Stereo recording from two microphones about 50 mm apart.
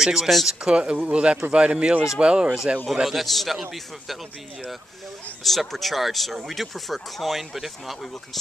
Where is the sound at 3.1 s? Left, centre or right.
Centre.